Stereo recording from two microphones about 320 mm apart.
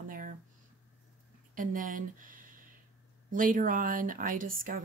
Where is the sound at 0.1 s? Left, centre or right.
Right.